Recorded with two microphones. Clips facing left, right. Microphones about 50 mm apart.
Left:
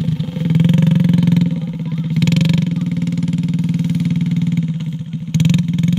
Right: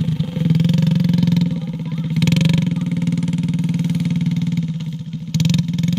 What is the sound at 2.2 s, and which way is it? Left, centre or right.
Vehicle, centre.